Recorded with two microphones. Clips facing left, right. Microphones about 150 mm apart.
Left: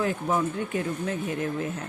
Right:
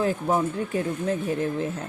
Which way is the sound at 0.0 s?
30° right (ahead or behind).